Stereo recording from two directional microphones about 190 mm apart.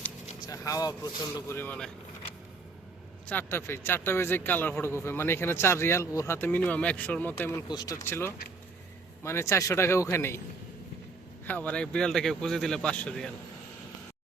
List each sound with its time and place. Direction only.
0.4 s speech: 15° left (ahead or behind)
3.2 s speech: 10° left (ahead or behind)
11.4 s speech: 10° left (ahead or behind)